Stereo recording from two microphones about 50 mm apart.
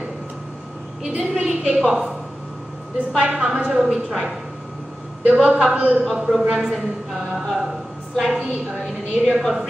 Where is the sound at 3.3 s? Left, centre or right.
Centre.